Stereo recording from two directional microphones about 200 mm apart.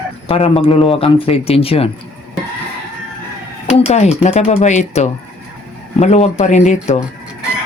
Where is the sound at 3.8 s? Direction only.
35° left (ahead or behind).